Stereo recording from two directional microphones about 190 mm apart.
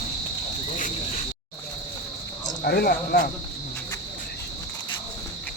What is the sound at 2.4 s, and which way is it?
Speech, 55° left (ahead or behind).